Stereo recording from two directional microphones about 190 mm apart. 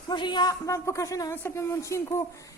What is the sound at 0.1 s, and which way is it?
A woman's voice, 25° left (ahead or behind).